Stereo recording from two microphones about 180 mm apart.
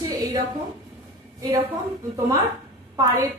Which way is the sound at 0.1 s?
20° right (ahead or behind).